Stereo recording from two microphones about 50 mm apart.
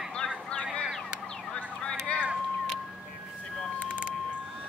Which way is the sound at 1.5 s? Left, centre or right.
Centre.